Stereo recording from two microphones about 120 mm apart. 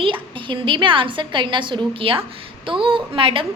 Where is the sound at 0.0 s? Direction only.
45° right (ahead or behind).